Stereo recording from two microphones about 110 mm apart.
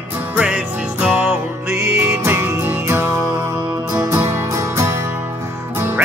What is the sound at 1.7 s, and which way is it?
Music, 25° right (ahead or behind).